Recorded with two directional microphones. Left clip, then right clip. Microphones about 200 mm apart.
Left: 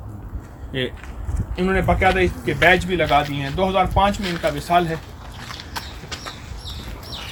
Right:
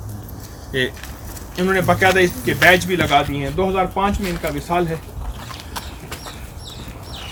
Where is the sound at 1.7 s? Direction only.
45° left (ahead or behind).